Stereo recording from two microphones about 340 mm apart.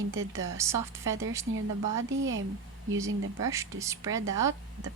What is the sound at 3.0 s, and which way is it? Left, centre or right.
Speech, centre.